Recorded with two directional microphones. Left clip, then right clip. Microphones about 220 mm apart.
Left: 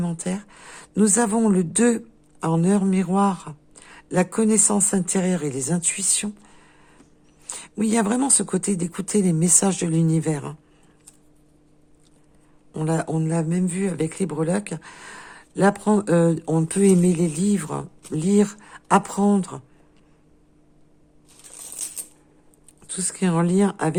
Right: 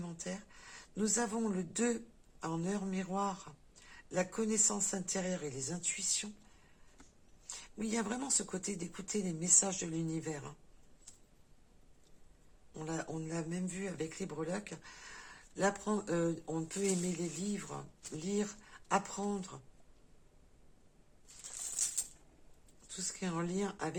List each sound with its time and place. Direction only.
0.0 s speech: 50° left (ahead or behind)
7.4 s speech: 50° left (ahead or behind)
12.7 s speech: 50° left (ahead or behind)
23.0 s speech: 50° left (ahead or behind)